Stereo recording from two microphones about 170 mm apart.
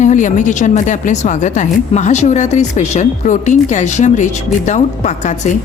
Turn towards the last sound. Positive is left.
turn(degrees=45)  # may be behind; listen again after turning